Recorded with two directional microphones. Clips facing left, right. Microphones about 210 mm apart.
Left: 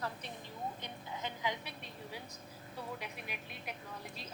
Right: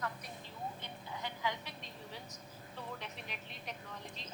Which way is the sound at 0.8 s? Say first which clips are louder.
Left 1 dB; 15° left (ahead or behind).